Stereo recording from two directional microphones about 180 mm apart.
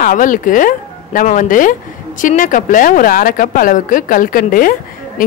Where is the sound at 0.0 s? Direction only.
50° left (ahead or behind).